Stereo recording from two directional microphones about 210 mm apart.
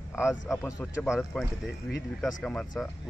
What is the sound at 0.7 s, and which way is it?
Speech, 15° left (ahead or behind).